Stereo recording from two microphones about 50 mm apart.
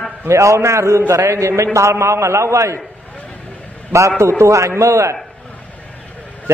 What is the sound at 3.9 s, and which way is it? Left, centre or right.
A man's voice, right.